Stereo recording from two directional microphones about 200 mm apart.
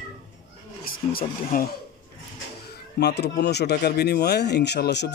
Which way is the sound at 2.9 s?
55° left (ahead or behind).